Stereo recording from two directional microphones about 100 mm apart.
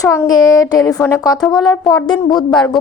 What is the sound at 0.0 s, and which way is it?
Speech, 40° left (ahead or behind).